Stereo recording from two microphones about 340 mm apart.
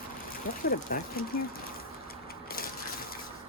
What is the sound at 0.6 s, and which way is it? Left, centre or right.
Speech, left.